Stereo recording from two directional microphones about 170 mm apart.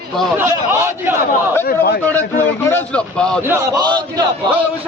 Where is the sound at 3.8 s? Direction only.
25° right (ahead or behind).